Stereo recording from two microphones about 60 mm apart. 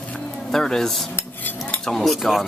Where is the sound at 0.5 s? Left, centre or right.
Centre.